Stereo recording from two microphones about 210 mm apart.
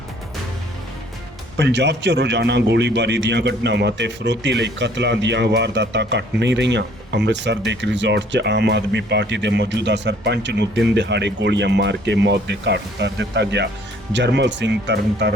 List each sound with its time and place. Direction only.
1.5 s a man's voice: 55° right (ahead or behind)